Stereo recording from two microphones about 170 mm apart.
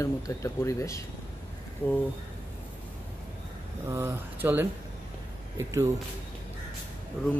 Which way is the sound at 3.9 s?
15° right (ahead or behind).